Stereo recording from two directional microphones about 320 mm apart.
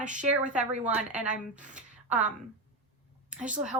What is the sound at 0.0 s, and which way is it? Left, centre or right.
Speech, right.